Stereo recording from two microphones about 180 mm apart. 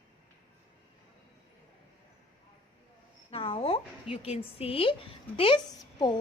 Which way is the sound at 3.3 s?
30° left (ahead or behind).